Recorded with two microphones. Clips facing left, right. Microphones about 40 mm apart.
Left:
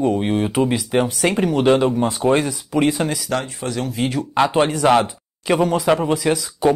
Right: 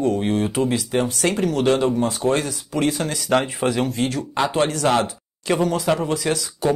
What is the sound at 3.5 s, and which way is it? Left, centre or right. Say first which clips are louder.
Speech: right 5 dB; right.